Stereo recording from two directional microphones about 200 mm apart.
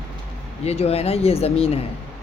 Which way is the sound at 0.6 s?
30° left (ahead or behind).